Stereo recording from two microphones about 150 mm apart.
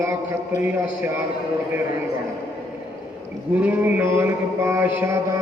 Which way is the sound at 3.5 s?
10° right (ahead or behind).